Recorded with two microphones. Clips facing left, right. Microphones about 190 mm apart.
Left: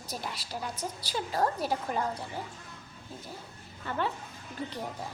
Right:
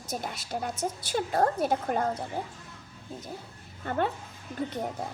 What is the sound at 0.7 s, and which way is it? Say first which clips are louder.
Speech: right 5 dB; 25° right (ahead or behind).